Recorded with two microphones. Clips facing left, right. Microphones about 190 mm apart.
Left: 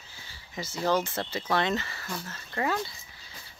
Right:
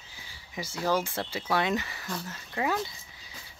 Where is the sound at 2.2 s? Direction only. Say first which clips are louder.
Even; 10° right (ahead or behind).